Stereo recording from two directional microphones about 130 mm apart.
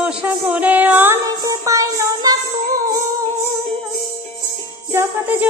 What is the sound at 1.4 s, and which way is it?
Music, 25° right (ahead or behind).